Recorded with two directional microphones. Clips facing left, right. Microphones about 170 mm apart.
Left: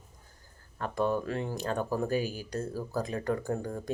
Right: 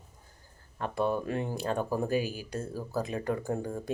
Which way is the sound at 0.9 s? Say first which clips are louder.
Even; 10° right (ahead or behind).